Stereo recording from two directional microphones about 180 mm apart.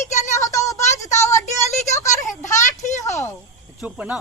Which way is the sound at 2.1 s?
45° left (ahead or behind).